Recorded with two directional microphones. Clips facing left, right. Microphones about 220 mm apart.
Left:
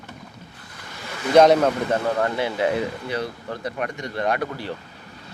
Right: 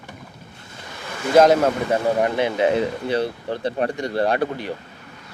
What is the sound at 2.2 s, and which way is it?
Speech, 20° right (ahead or behind).